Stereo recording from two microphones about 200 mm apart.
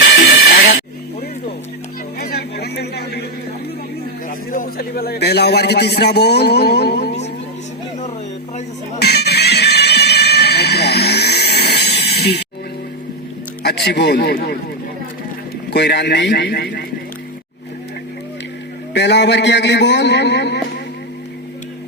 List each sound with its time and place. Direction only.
2.1 s a sound: 55° left (ahead or behind)
4.5 s a man's voice: 50° left (ahead or behind)
9.0 s music: 55° left (ahead or behind)
12.1 s a sound: 55° left (ahead or behind)
13.7 s a man's voice: 55° left (ahead or behind)
15.7 s a man's voice: 55° left (ahead or behind)
18.9 s a man's voice: 60° left (ahead or behind)